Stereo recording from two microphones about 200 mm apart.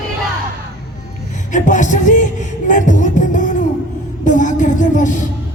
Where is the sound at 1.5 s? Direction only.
40° left (ahead or behind).